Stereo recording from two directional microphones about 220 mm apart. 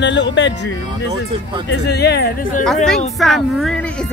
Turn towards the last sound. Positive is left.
turn(degrees=5)  # may be behind; listen again after turning